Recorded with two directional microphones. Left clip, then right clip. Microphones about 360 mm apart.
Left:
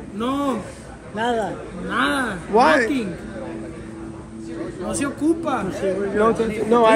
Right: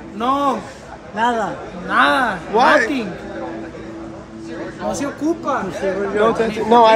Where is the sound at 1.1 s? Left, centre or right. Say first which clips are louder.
Right 4 dB; right.